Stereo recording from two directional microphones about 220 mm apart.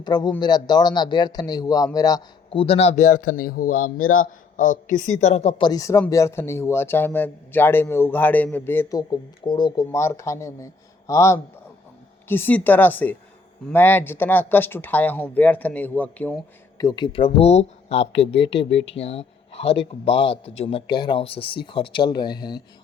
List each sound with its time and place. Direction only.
0.0 s speech: 20° left (ahead or behind); by 3.8 s 40° left (ahead or behind)
3.9 s a man's voice: 70° left (ahead or behind)
4.2 s a woman's voice: 35° left (ahead or behind); by 22.6 s 20° left (ahead or behind)